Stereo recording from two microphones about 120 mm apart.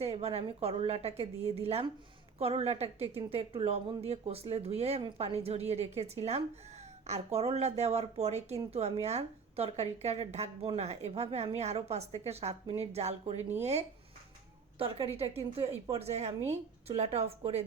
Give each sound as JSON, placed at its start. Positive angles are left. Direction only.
{"t": 0.0, "sound": "a woman's voice", "side_deg": -55}
{"t": 14.8, "sound": "a woman's voice", "side_deg": -50}